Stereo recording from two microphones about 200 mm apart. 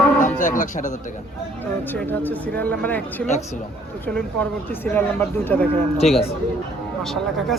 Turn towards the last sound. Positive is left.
turn(degrees=0)  # may be behind; listen again after turning